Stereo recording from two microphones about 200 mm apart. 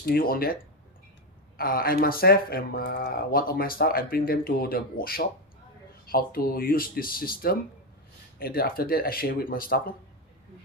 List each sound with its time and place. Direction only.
0.0 s speech: 50° left (ahead or behind)
1.5 s speech: 45° left (ahead or behind)